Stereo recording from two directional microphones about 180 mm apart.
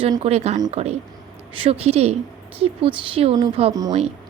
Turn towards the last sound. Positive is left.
turn(degrees=-20)  # may be behind; listen again after turning